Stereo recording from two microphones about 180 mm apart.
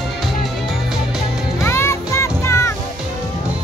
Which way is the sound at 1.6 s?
15° left (ahead or behind).